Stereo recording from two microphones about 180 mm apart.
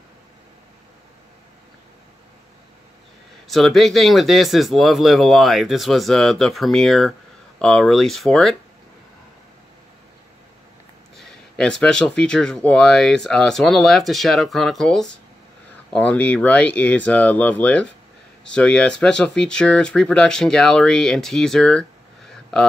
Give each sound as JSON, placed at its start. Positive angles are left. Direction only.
{"t": 3.4, "sound": "speech", "side_deg": 0}
{"t": 11.1, "sound": "speech", "side_deg": 5}